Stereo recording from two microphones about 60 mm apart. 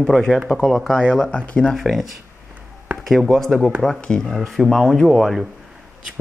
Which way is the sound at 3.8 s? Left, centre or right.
Centre.